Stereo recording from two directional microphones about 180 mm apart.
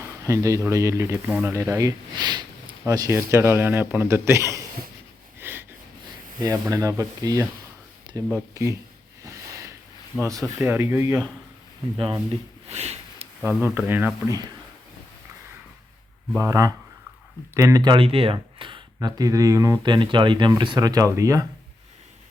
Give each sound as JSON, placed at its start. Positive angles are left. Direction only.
{"t": 0.0, "sound": "speech", "side_deg": -15}
{"t": 5.4, "sound": "a sound", "side_deg": -10}
{"t": 6.4, "sound": "speech", "side_deg": -20}
{"t": 9.2, "sound": "a sound", "side_deg": -15}
{"t": 10.1, "sound": "speech", "side_deg": 5}
{"t": 10.6, "sound": "speech", "side_deg": -15}
{"t": 12.3, "sound": "sniff", "side_deg": -35}
{"t": 13.4, "sound": "speech", "side_deg": -5}
{"t": 16.4, "sound": "speech", "side_deg": -20}